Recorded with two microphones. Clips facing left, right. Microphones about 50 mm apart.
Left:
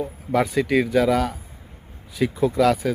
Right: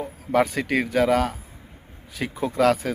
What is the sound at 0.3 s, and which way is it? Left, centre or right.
Speech, right.